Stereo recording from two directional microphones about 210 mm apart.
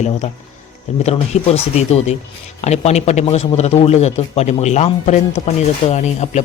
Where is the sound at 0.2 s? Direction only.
30° left (ahead or behind).